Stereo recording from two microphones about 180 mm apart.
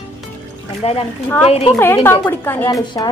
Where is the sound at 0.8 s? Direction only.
30° left (ahead or behind).